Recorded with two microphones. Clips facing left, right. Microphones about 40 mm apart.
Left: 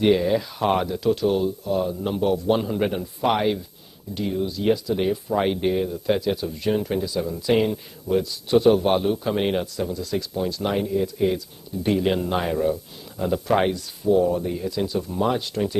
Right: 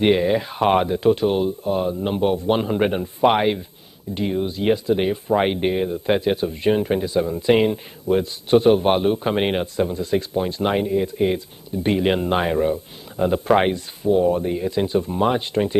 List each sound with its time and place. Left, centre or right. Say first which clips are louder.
0.0 s speech: right 2 dB; right